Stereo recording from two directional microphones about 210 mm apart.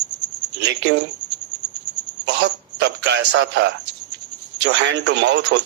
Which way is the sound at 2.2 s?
55° right (ahead or behind).